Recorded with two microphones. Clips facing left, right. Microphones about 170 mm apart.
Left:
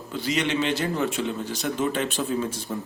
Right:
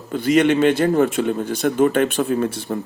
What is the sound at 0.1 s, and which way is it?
A man's voice, 55° right (ahead or behind).